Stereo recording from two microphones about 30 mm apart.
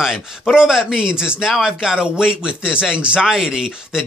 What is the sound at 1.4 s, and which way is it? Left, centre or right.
Speech, centre.